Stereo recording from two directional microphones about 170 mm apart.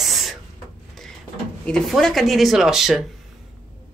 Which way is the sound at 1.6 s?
5° left (ahead or behind).